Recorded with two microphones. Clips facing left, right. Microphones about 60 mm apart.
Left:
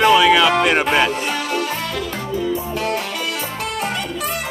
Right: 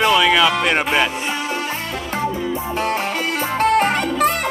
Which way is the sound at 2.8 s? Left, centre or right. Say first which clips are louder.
Right 2 dB; right.